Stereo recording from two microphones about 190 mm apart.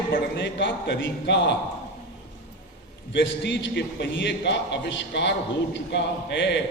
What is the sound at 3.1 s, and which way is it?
A man's voice, 65° left (ahead or behind).